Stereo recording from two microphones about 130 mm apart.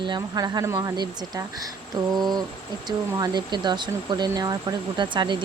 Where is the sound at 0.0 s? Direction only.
35° right (ahead or behind).